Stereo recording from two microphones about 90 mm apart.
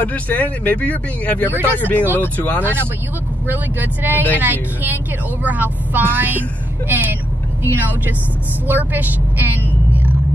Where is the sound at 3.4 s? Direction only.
20° right (ahead or behind).